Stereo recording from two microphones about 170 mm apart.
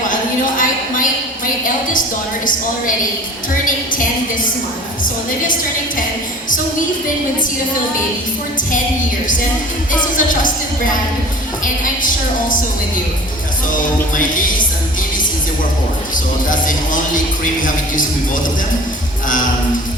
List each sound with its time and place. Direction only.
0.1 s a sound: 50° left (ahead or behind)
10.2 s a woman's voice: 50° left (ahead or behind)
14.2 s a woman's voice: 50° left (ahead or behind)
16.1 s a woman's voice: 50° left (ahead or behind)